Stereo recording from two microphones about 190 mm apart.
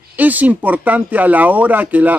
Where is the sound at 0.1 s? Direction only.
10° right (ahead or behind).